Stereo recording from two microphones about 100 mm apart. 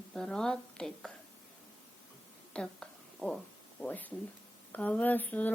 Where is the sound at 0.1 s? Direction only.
5° left (ahead or behind).